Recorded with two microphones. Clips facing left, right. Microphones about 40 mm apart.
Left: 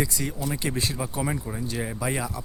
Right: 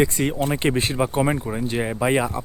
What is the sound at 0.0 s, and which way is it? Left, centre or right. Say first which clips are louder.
Speech: right 8 dB; right.